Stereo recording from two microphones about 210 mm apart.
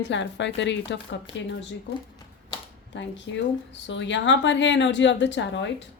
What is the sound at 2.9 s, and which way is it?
A woman's voice, 60° left (ahead or behind).